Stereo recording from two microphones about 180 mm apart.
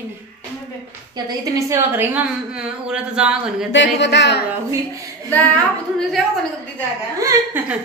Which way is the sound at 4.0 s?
75° left (ahead or behind).